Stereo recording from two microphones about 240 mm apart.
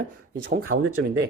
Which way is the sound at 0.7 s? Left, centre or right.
Right.